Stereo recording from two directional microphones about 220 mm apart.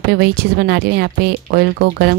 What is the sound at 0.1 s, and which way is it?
Speech, 45° right (ahead or behind).